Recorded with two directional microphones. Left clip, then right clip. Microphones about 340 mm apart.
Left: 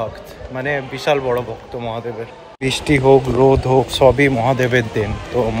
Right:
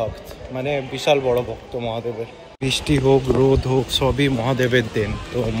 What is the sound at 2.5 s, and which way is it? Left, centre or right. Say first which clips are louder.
Speech: left 4 dB; centre.